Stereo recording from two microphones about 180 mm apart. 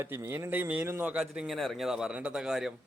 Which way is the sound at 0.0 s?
15° right (ahead or behind).